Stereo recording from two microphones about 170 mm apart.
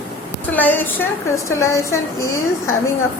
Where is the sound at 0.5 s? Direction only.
10° left (ahead or behind).